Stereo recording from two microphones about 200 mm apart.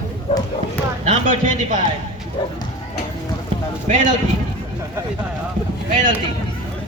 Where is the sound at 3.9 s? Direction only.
40° right (ahead or behind).